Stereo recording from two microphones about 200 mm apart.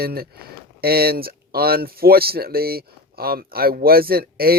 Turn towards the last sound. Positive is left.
turn(degrees=-50)  # may be behind; listen again after turning